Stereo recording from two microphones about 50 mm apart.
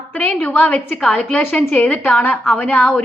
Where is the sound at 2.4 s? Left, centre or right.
Left.